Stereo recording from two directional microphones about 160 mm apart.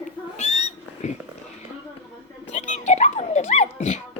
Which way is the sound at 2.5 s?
50° left (ahead or behind).